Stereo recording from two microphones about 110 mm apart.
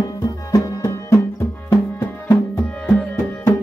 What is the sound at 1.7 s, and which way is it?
Music, 25° left (ahead or behind).